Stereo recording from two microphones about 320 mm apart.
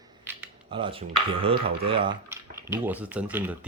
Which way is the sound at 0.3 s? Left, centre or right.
Centre.